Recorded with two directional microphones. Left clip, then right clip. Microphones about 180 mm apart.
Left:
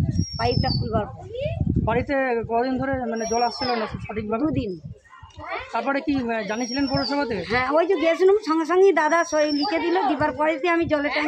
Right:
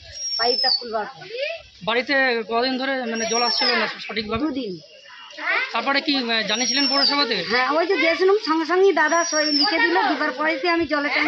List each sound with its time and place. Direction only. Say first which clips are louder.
0.4 s a woman's voice: right 4 dB; 30° left (ahead or behind)
1.9 s speech: right 3 dB; 55° left (ahead or behind)
5.7 s speech: right 3 dB; 50° left (ahead or behind)
7.4 s a woman's voice: right 1 dB; 25° left (ahead or behind)